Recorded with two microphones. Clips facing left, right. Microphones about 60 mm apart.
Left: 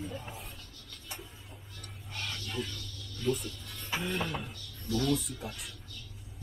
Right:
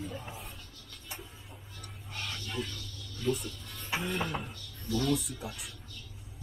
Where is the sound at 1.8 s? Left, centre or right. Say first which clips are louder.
Even; centre.